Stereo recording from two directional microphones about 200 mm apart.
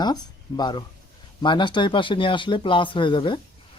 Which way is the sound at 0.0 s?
20° left (ahead or behind).